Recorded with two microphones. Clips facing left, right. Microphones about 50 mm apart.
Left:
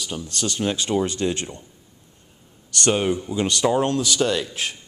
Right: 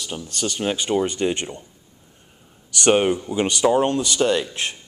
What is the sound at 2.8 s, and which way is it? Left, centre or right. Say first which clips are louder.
Speech: right 4 dB; right.